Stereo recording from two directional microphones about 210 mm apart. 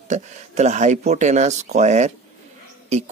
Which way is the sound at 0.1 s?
35° right (ahead or behind).